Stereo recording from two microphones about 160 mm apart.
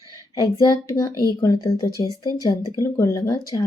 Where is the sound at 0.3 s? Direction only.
20° left (ahead or behind).